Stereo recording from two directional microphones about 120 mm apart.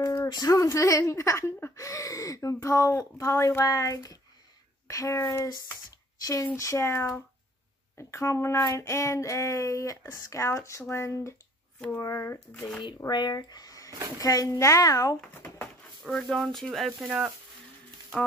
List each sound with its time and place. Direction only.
0.0 s a woman's voice: 30° left (ahead or behind)
6.5 s a woman's voice: 25° left (ahead or behind)
12.8 s a woman's voice: 40° left (ahead or behind)
16.0 s speech: centre (ahead or behind)